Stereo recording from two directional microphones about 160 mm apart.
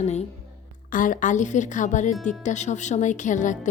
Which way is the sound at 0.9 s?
55° left (ahead or behind).